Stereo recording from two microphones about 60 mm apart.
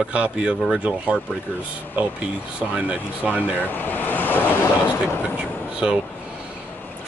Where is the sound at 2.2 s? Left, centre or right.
Centre.